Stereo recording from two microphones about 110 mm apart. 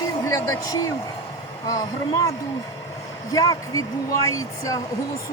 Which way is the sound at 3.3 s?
30° left (ahead or behind).